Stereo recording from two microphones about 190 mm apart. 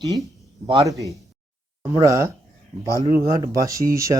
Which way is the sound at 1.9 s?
15° right (ahead or behind).